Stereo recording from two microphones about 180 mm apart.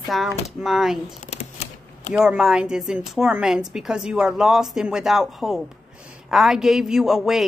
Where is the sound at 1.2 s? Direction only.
40° left (ahead or behind).